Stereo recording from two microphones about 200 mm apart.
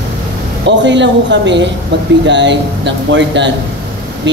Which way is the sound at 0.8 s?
65° right (ahead or behind).